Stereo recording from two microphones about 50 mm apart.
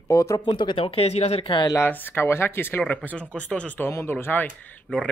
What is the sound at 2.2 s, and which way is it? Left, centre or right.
Speech, left.